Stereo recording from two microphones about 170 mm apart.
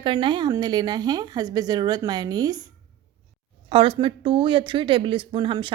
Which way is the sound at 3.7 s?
30° right (ahead or behind).